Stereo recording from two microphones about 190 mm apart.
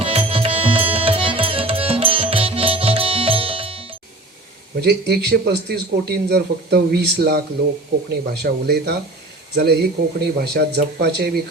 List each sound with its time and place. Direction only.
0.0 s music: 30° right (ahead or behind)
4.8 s a man's voice: 55° right (ahead or behind)